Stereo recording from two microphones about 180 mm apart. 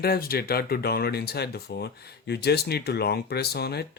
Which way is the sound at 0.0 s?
55° left (ahead or behind).